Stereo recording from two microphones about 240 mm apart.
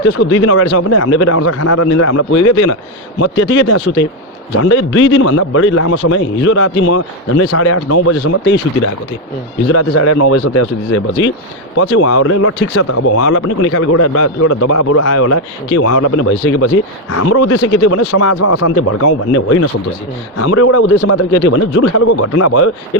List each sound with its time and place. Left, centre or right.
0.0 s speech: left
3.2 s a man's voice: left
11.8 s a man's voice: left
21.4 s speech: left